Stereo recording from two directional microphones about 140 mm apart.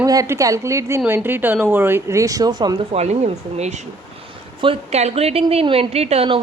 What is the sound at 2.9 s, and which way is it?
Speech, 50° right (ahead or behind).